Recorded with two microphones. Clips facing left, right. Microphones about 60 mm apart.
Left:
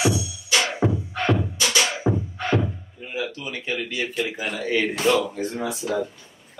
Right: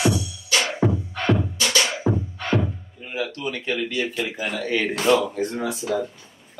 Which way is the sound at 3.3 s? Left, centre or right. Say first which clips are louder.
Right 3 dB; centre.